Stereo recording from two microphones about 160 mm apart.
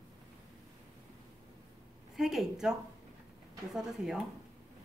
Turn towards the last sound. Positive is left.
turn(degrees=-5)  # may be behind; listen again after turning